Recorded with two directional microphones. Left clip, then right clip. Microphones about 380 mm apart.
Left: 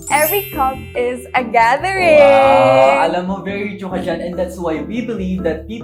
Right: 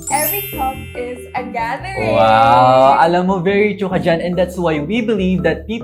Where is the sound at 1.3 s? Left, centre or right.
Left.